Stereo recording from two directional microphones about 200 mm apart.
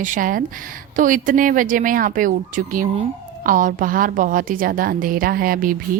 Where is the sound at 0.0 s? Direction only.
40° right (ahead or behind).